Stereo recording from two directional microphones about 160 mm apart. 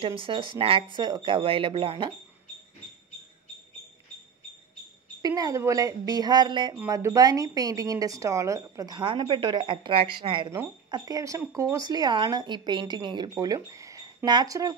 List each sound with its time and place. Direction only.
0.0 s speech: 35° right (ahead or behind)
5.2 s speech: 25° right (ahead or behind)